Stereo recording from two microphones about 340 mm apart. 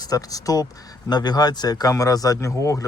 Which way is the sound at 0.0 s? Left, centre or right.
Centre.